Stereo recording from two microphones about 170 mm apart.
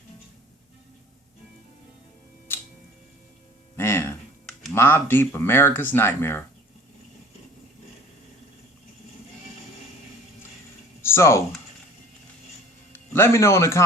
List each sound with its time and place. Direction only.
2.5 s music: 10° left (ahead or behind)
3.8 s computer keyboard: 15° left (ahead or behind)
4.7 s speech: 15° left (ahead or behind)
11.0 s a sound: 15° left (ahead or behind)
12.9 s speech: 15° left (ahead or behind)